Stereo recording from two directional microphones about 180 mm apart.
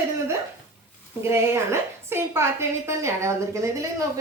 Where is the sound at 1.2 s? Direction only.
15° right (ahead or behind).